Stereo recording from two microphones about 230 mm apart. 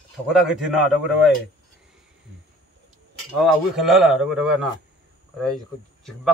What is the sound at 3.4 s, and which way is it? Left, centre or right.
A man's voice, centre.